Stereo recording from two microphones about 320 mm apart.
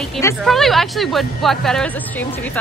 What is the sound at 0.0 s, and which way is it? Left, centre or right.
Speech, centre.